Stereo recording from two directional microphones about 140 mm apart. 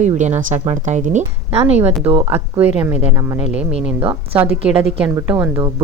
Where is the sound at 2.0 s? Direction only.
45° right (ahead or behind).